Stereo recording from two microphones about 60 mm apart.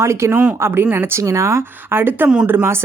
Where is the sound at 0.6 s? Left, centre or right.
Right.